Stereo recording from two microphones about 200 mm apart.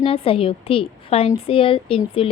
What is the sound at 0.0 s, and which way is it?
A woman's voice, 30° left (ahead or behind).